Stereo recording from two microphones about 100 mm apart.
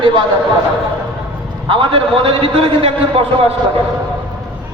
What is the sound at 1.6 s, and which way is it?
A man's voice, 60° right (ahead or behind).